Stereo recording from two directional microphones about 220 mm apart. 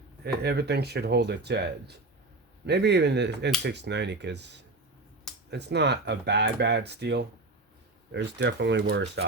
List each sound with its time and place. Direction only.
0.4 s speech: 50° right (ahead or behind)